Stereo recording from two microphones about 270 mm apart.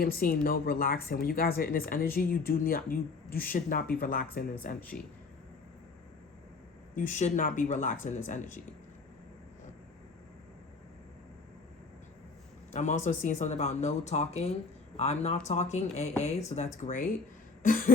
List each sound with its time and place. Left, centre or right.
0.0 s a woman's voice: left
6.9 s speech: left
12.7 s a woman's voice: left